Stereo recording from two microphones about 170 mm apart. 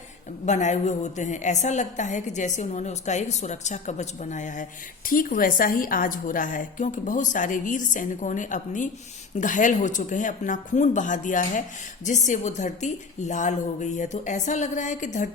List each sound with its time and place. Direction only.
0.4 s a woman's voice: 45° left (ahead or behind)